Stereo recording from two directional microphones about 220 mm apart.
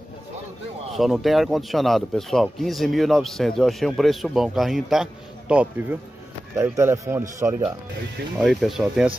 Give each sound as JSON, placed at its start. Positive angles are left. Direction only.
{"t": 0.9, "sound": "speech", "side_deg": 0}
{"t": 8.4, "sound": "speech", "side_deg": 0}